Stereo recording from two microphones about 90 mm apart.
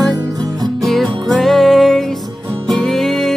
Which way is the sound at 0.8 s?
Centre (ahead or behind).